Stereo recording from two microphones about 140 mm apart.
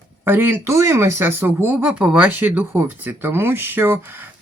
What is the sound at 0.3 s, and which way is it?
Speech, 15° right (ahead or behind).